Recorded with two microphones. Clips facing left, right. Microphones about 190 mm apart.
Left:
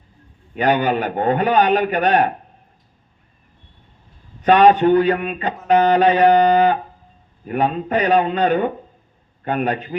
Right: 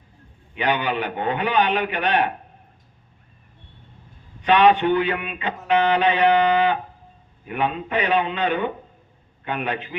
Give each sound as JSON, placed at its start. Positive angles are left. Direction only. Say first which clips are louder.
{"t": 0.5, "sound": "a man's voice", "louder": "left 6 dB", "side_deg": 45}
{"t": 4.4, "sound": "a man's voice", "louder": "left 4 dB", "side_deg": 45}